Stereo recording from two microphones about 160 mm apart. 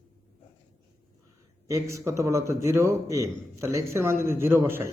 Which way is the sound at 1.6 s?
20° right (ahead or behind).